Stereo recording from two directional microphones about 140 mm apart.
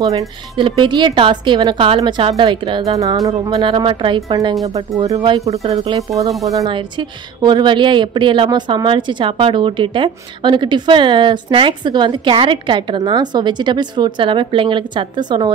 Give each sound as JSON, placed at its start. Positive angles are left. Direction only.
{"t": 0.0, "sound": "a woman's voice", "side_deg": -25}
{"t": 5.6, "sound": "speech", "side_deg": -45}
{"t": 5.9, "sound": "speech", "side_deg": -25}
{"t": 6.7, "sound": "a woman's voice", "side_deg": -35}